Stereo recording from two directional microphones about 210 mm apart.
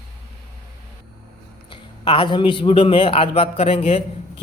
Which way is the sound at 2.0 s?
20° left (ahead or behind).